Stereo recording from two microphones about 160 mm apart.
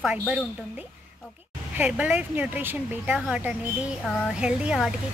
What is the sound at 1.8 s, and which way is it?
A woman's voice, 10° right (ahead or behind).